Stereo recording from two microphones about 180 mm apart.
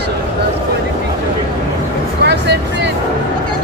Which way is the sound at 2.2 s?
70° right (ahead or behind).